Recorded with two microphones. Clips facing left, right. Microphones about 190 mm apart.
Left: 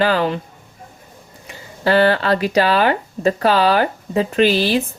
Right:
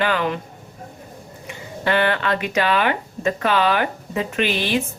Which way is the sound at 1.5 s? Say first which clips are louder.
Left 5 dB; 35° left (ahead or behind).